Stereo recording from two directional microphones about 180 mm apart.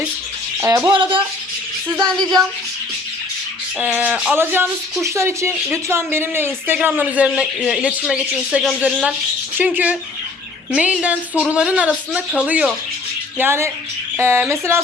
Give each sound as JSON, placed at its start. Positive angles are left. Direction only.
{"t": 0.9, "sound": "speech", "side_deg": -30}
{"t": 2.0, "sound": "speech", "side_deg": 5}
{"t": 3.9, "sound": "speech", "side_deg": -10}